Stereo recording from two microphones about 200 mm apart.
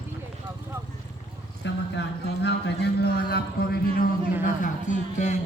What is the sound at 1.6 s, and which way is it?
Speech, 60° left (ahead or behind).